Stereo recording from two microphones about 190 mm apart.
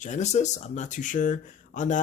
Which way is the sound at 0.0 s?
40° left (ahead or behind).